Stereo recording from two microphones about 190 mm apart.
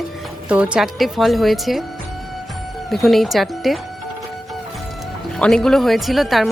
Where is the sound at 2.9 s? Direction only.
Centre (ahead or behind).